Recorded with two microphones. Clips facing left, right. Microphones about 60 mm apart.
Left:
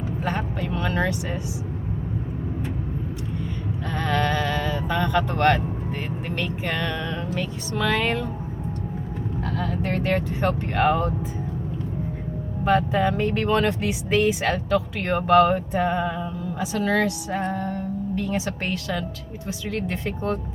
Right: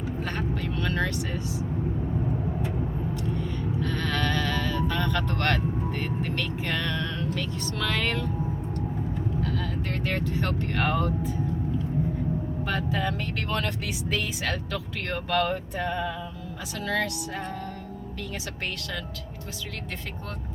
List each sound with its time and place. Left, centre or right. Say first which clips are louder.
0.3 s vehicle: left 6 dB; centre
3.8 s sheep: left 5 dB; centre
6.7 s speech: left 3 dB; centre
9.4 s vehicle: left 3 dB; left
10.1 s speech: left 5 dB; centre
12.6 s speech: left 10 dB; left